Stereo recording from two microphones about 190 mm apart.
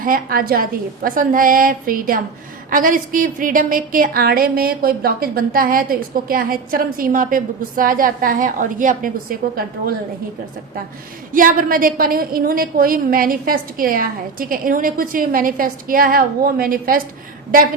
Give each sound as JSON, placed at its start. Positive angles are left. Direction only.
{"t": 0.0, "sound": "a woman's voice", "side_deg": -50}
{"t": 11.3, "sound": "a woman's voice", "side_deg": -45}